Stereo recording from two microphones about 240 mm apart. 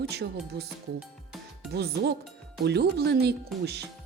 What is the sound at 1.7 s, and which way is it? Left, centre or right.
Speech, right.